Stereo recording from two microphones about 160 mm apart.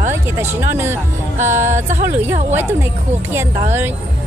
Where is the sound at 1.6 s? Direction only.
50° right (ahead or behind).